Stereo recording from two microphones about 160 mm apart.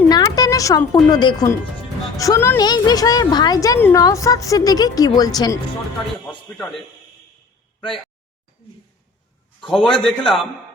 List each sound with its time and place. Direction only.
0.1 s a woman's voice: 25° left (ahead or behind)
6.2 s a man's voice: 5° left (ahead or behind)
9.6 s a man's voice: centre (ahead or behind)